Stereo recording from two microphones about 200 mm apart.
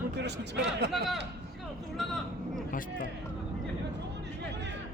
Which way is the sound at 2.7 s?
45° left (ahead or behind).